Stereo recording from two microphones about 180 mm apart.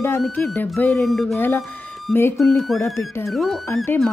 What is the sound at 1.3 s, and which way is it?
Speech, 10° left (ahead or behind).